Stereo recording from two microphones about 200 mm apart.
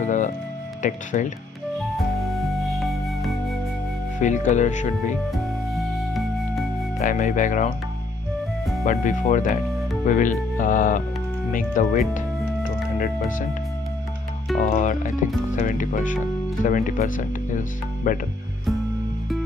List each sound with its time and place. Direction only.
0.0 s music: 40° left (ahead or behind)
1.1 s speech: 40° left (ahead or behind)
2.1 s music: centre (ahead or behind)
4.2 s speech: 35° left (ahead or behind)
5.3 s music: centre (ahead or behind)
7.0 s speech: 40° left (ahead or behind)
8.8 s speech: 35° left (ahead or behind)
13.0 s speech: 45° left (ahead or behind)
14.7 s speech: 40° left (ahead or behind)